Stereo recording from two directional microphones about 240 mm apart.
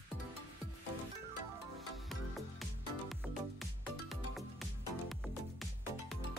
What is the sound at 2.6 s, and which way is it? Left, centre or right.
Music, centre.